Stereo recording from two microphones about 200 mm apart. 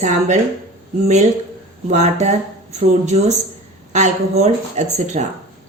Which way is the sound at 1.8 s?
35° right (ahead or behind).